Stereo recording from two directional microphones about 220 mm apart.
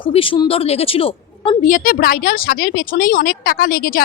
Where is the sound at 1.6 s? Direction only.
40° left (ahead or behind).